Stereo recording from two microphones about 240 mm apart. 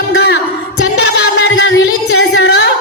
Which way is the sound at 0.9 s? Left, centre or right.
Left.